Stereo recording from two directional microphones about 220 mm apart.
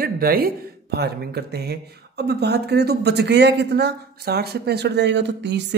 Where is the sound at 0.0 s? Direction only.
40° right (ahead or behind).